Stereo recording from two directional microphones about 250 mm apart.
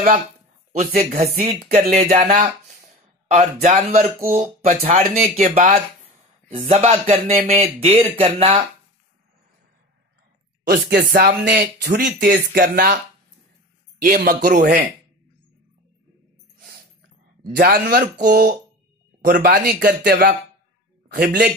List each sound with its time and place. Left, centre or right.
0.7 s speech: right
10.7 s speech: right
14.0 s speech: right
17.6 s speech: right